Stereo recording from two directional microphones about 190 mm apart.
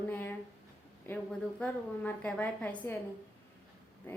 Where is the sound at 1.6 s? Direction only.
5° left (ahead or behind).